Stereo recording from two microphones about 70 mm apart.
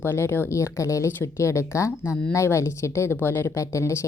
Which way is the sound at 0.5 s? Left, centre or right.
Left.